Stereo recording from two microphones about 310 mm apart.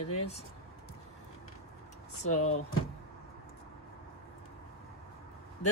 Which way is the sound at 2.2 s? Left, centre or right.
Left.